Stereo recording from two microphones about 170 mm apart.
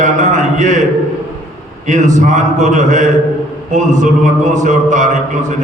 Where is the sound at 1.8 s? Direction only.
45° right (ahead or behind).